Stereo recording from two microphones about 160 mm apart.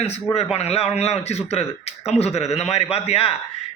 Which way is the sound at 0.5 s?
40° left (ahead or behind).